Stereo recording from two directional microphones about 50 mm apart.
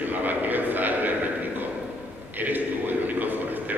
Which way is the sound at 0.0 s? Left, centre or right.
Right.